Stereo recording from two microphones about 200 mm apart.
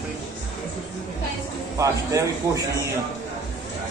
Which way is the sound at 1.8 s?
15° right (ahead or behind).